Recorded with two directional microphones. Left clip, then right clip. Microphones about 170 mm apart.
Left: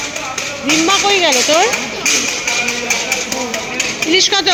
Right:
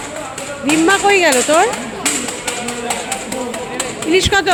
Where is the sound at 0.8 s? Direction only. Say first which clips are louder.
Right 2 dB; 30° right (ahead or behind).